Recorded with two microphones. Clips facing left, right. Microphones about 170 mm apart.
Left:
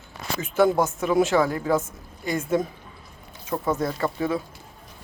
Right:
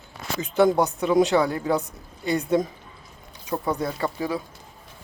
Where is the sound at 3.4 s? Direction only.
15° right (ahead or behind).